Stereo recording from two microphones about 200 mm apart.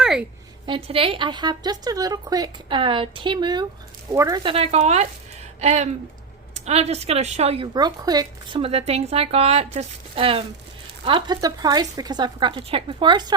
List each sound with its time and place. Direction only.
0.0 s a sound: 5° right (ahead or behind)
0.9 s speech: 25° right (ahead or behind)
4.4 s a woman's voice: 30° right (ahead or behind)